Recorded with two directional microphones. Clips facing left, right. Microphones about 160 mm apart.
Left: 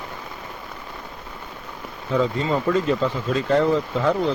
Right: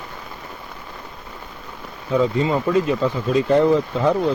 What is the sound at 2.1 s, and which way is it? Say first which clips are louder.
Speech: right 3 dB; 10° right (ahead or behind).